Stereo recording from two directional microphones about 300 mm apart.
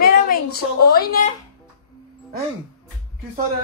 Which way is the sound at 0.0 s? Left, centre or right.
Left.